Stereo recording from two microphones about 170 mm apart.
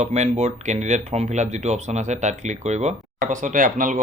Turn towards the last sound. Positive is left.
turn(degrees=-50)  # may be behind; listen again after turning